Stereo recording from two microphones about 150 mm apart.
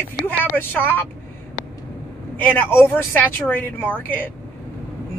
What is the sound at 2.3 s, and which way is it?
A man's voice, 10° left (ahead or behind).